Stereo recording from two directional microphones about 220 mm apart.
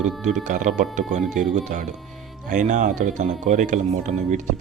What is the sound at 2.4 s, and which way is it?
Speech, 35° right (ahead or behind).